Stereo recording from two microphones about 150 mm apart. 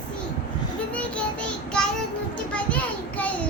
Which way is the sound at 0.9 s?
10° left (ahead or behind).